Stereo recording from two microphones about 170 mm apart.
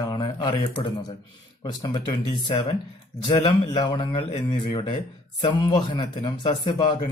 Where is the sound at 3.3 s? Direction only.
30° left (ahead or behind).